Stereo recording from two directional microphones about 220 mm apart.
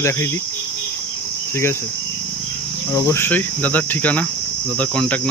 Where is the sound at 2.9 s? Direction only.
10° left (ahead or behind).